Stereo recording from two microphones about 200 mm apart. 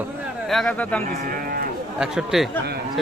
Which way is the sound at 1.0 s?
45° right (ahead or behind).